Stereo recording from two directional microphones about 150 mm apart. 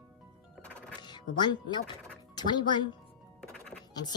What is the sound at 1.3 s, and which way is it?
Speech, 30° left (ahead or behind).